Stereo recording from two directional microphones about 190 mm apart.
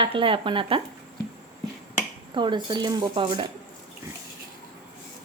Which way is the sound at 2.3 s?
25° right (ahead or behind).